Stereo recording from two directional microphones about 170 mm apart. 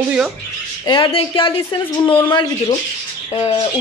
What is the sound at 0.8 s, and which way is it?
Speech, 30° left (ahead or behind).